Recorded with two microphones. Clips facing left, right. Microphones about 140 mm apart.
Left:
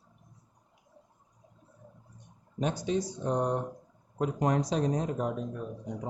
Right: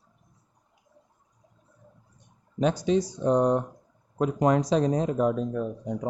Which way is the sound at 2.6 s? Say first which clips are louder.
Right 6 dB; 90° right.